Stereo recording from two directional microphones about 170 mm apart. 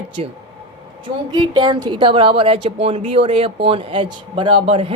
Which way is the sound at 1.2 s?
25° right (ahead or behind).